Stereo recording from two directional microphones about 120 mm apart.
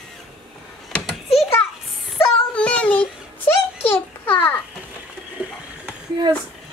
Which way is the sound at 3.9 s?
15° left (ahead or behind).